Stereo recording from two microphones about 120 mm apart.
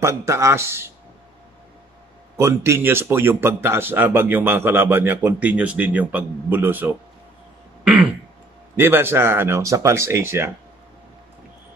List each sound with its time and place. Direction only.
0.0 s speech: 25° right (ahead or behind)
2.3 s a man's voice: 25° right (ahead or behind)
7.8 s throat clearing: 5° right (ahead or behind)
8.7 s speech: 20° right (ahead or behind)